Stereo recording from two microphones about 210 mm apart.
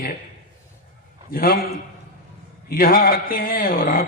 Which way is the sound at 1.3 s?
45° left (ahead or behind).